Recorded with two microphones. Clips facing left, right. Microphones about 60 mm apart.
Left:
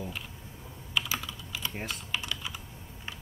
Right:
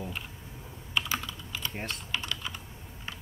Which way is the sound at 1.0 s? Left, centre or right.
Centre.